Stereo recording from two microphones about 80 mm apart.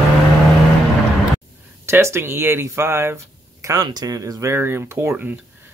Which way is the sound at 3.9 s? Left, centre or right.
Right.